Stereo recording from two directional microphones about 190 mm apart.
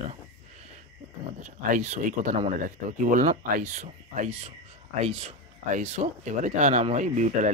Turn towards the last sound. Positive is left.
turn(degrees=-40)  # may be behind; listen again after turning